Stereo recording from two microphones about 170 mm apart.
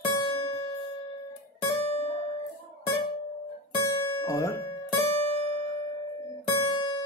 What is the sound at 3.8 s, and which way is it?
Music, 20° left (ahead or behind).